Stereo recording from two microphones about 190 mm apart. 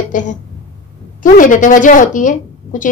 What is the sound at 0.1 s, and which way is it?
A woman's voice, 40° left (ahead or behind).